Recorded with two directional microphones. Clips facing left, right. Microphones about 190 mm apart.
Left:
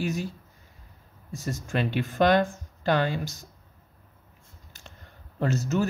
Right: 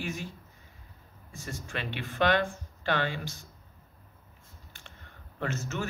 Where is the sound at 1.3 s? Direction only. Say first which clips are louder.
Left 8 dB; 40° left (ahead or behind).